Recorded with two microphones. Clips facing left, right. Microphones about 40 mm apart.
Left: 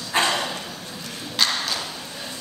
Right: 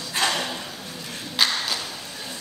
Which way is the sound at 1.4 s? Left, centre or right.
Centre.